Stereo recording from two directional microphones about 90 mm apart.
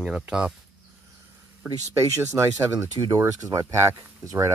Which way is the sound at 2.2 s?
35° right (ahead or behind).